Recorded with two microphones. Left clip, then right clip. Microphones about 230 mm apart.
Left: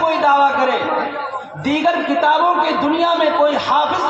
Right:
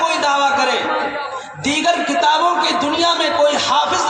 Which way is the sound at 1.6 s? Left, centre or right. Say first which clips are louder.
Even; right.